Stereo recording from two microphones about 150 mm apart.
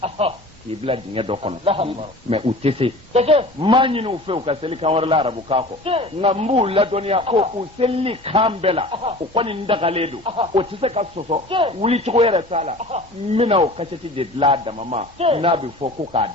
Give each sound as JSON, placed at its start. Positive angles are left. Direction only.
{"t": 0.0, "sound": "a man's voice", "side_deg": -40}